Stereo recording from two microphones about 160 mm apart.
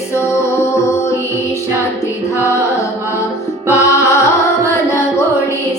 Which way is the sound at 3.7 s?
15° left (ahead or behind).